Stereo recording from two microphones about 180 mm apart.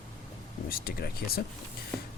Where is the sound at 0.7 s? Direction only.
55° left (ahead or behind).